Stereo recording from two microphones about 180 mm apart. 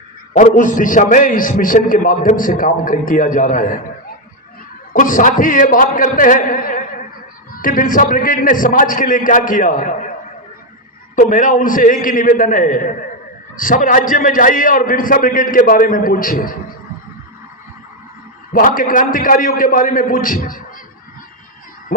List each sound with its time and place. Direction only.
0.3 s a man's voice: 45° left (ahead or behind)
4.9 s a man's voice: 45° left (ahead or behind)
11.1 s a man's voice: 45° left (ahead or behind)
18.5 s a man's voice: 50° left (ahead or behind)